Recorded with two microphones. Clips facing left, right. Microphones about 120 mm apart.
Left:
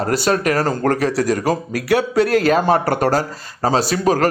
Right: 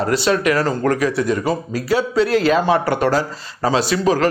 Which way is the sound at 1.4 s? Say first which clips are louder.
Left 1 dB; 70° left (ahead or behind).